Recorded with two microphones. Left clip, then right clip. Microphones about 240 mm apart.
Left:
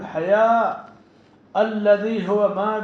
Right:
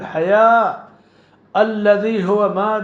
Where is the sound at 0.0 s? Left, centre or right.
Right.